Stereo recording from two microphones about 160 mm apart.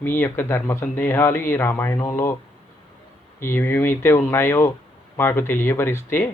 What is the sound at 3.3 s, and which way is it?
Speech, 15° left (ahead or behind).